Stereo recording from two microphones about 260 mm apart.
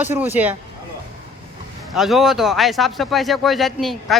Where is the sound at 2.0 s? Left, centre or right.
Centre.